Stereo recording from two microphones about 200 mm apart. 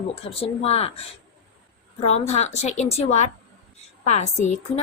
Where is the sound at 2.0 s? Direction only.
35° left (ahead or behind).